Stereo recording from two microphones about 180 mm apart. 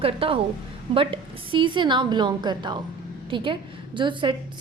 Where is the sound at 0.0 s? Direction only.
30° right (ahead or behind).